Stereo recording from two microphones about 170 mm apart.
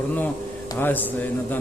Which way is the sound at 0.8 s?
10° left (ahead or behind).